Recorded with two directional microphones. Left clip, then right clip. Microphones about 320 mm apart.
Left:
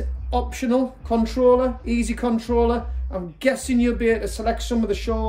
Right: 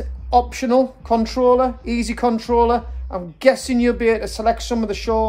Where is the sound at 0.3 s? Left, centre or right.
Centre.